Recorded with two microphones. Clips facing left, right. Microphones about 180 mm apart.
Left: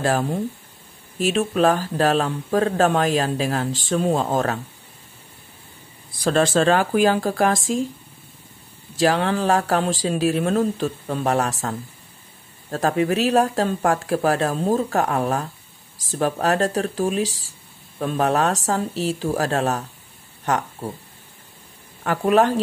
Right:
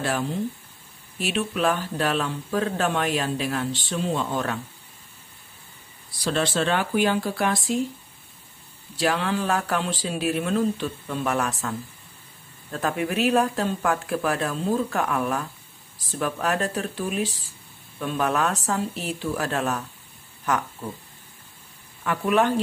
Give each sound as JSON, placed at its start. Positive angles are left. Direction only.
{"t": 0.0, "sound": "speech", "side_deg": 45}
{"t": 6.2, "sound": "speech", "side_deg": 45}
{"t": 8.9, "sound": "speech", "side_deg": 40}
{"t": 12.7, "sound": "speech", "side_deg": 40}
{"t": 22.0, "sound": "speech", "side_deg": 35}